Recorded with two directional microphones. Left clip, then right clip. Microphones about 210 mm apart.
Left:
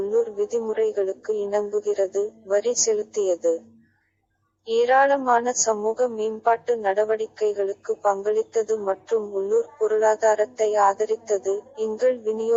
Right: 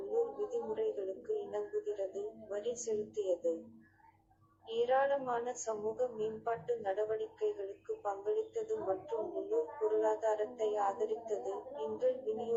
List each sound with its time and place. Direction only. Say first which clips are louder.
0.1 s a woman's voice: left 10 dB; 40° left (ahead or behind)
4.6 s a woman's voice: left 14 dB; 45° left (ahead or behind)